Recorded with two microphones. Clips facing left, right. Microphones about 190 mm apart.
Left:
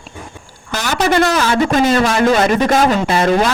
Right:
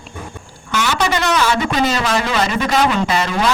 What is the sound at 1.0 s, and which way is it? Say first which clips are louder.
A woman's voice: left 5 dB; 50° left (ahead or behind).